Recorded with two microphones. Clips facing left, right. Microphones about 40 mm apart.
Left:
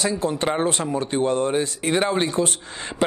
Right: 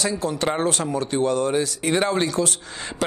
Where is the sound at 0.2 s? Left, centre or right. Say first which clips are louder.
Left 1 dB; left.